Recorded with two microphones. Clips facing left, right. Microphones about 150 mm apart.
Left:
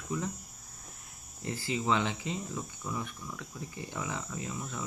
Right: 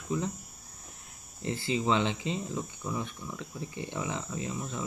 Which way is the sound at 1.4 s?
25° right (ahead or behind).